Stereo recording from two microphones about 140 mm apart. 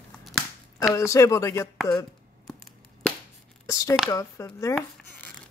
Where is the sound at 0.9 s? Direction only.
20° left (ahead or behind).